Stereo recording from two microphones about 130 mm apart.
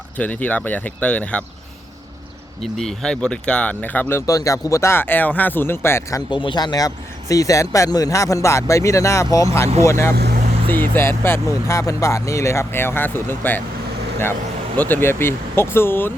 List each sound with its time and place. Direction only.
0.2 s speech: 10° left (ahead or behind)
2.7 s speech: 5° left (ahead or behind)
4.3 s speech: 25° left (ahead or behind)
6.3 s speech: 35° left (ahead or behind); by 13.6 s 15° left (ahead or behind)
14.8 s speech: 15° left (ahead or behind)